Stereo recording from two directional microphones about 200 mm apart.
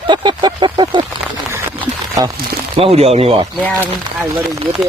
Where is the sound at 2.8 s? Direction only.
30° right (ahead or behind).